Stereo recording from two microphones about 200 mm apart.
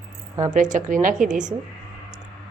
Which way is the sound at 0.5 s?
40° right (ahead or behind).